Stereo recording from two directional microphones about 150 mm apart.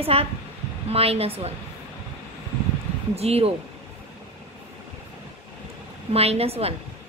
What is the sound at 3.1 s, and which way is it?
Speech, 45° right (ahead or behind).